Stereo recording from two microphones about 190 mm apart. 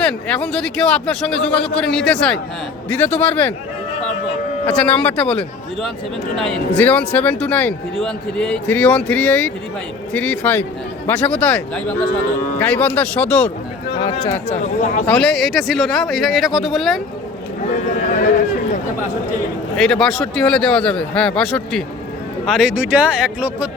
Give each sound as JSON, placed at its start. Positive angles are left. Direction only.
{"t": 0.0, "sound": "a man's voice", "side_deg": 5}
{"t": 4.6, "sound": "speech", "side_deg": 10}
{"t": 13.9, "sound": "speech", "side_deg": 25}
{"t": 14.3, "sound": "speech", "side_deg": 15}
{"t": 14.5, "sound": "speech", "side_deg": 40}
{"t": 15.0, "sound": "a man's voice", "side_deg": 5}
{"t": 17.9, "sound": "speech", "side_deg": 40}
{"t": 19.7, "sound": "a man's voice", "side_deg": 5}